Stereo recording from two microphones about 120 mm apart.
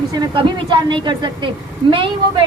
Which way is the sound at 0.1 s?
40° right (ahead or behind).